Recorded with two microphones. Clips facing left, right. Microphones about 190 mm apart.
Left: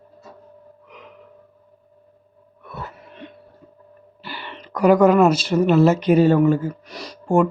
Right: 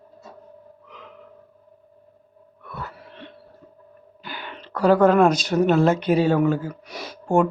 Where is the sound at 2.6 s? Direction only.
25° left (ahead or behind).